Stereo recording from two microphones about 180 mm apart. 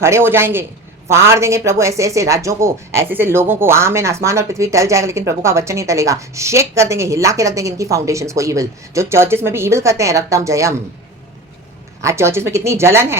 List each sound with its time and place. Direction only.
0.0 s speech: 15° right (ahead or behind)
12.0 s speech: 15° right (ahead or behind)